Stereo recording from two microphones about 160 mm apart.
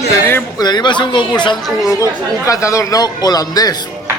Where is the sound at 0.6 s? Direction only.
25° left (ahead or behind).